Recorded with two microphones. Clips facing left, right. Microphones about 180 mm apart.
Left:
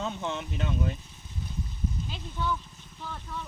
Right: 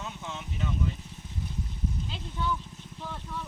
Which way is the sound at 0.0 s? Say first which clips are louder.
Left 7 dB; 60° left (ahead or behind).